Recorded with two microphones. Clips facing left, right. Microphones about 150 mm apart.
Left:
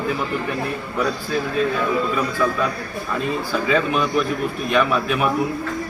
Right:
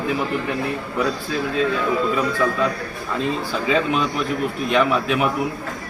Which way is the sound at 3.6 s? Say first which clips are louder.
Right 1 dB; 25° right (ahead or behind).